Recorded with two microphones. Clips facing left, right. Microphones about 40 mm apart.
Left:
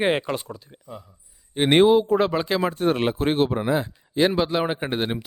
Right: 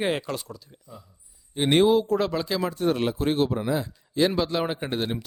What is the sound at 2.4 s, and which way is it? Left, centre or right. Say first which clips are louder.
A man's voice: left 3 dB; left.